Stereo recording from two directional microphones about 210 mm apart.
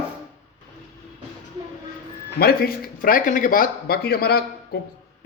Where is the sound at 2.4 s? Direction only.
45° left (ahead or behind).